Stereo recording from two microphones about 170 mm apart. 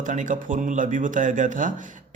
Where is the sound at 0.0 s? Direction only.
50° right (ahead or behind).